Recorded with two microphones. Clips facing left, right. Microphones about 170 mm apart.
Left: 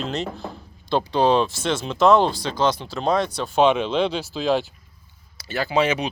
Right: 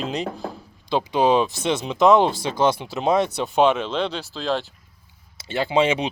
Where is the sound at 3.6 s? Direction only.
Centre (ahead or behind).